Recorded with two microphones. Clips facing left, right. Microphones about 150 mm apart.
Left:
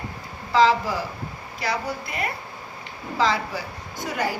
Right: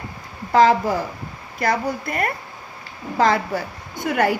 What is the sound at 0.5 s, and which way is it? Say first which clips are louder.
A woman's voice: right 4 dB; 50° right (ahead or behind).